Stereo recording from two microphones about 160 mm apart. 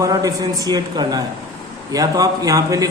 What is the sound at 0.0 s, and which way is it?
A man's voice, 20° right (ahead or behind).